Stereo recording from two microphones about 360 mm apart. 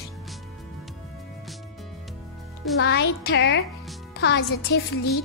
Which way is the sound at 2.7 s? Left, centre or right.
Left.